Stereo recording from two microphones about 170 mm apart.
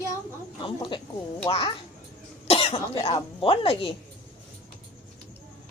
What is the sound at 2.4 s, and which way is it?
Cough, 35° left (ahead or behind).